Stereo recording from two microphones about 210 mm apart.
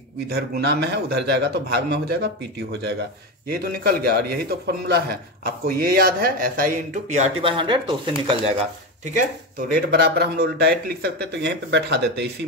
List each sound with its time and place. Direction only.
0.3 s a man's voice: 50° right (ahead or behind)
3.4 s a man's voice: 45° right (ahead or behind)
7.4 s speech: 25° right (ahead or behind)
9.1 s a man's voice: 40° right (ahead or behind)